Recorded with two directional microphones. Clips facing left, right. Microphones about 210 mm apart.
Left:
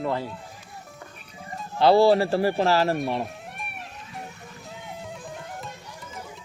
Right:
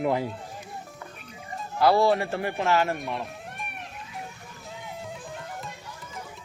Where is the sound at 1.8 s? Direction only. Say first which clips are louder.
Left 4 dB; 30° left (ahead or behind).